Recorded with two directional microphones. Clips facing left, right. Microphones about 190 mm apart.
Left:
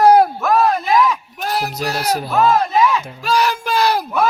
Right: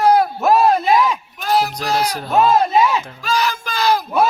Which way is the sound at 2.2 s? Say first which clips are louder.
Right 2 dB; 25° right (ahead or behind).